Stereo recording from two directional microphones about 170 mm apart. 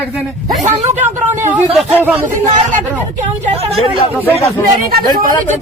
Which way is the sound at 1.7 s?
10° right (ahead or behind).